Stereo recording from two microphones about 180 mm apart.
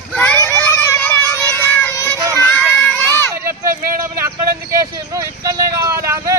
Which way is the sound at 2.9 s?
15° left (ahead or behind).